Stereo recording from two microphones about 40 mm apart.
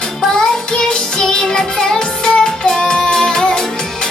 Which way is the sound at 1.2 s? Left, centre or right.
Centre.